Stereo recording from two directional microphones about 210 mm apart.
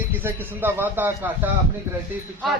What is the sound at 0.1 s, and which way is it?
Speech, 10° right (ahead or behind).